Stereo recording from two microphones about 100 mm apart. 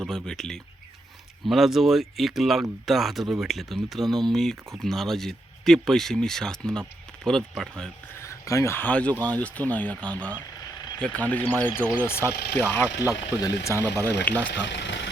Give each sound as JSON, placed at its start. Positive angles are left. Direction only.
{"t": 0.0, "sound": "speech", "side_deg": 5}
{"t": 8.1, "sound": "a sound", "side_deg": 30}
{"t": 8.8, "sound": "speech", "side_deg": 15}
{"t": 10.8, "sound": "a sound", "side_deg": 40}
{"t": 11.0, "sound": "speech", "side_deg": 15}
{"t": 13.1, "sound": "speech", "side_deg": 35}